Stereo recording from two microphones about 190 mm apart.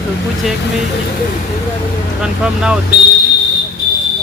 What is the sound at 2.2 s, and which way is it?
Speech, 5° right (ahead or behind).